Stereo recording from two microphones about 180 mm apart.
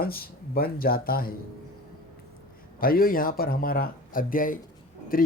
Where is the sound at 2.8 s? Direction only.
55° left (ahead or behind).